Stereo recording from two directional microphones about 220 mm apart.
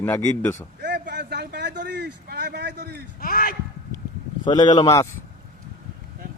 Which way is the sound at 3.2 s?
40° left (ahead or behind).